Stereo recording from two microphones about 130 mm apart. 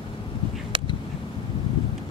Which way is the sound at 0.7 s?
40° right (ahead or behind).